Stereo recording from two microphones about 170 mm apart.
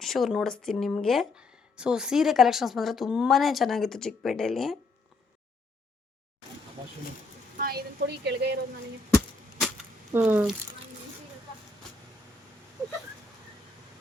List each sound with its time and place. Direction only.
0.0 s speech: centre (ahead or behind)
7.6 s speech: 70° right (ahead or behind)
10.1 s speech: 10° right (ahead or behind)